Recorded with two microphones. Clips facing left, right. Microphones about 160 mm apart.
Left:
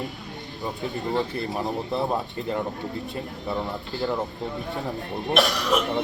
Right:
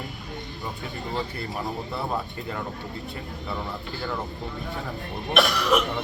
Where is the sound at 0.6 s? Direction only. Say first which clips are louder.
Left 8 dB; 20° left (ahead or behind).